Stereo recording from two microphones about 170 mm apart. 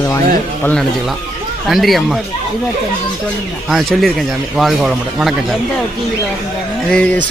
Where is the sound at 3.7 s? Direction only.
Centre (ahead or behind).